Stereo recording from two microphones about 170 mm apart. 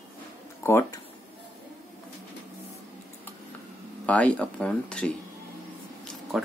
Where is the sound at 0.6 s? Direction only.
15° left (ahead or behind).